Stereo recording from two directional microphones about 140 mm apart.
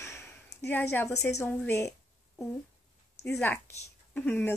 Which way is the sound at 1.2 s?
20° left (ahead or behind).